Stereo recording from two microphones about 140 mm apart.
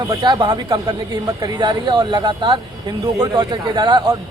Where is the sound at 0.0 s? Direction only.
30° right (ahead or behind).